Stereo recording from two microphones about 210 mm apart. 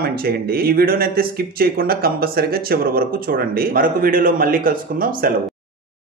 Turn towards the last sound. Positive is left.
turn(degrees=-40)  # may be behind; listen again after turning